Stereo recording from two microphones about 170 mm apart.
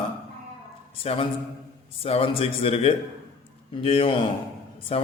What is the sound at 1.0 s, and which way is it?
A man's voice, 35° left (ahead or behind).